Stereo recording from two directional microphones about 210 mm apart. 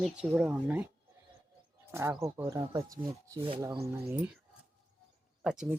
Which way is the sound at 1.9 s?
15° right (ahead or behind).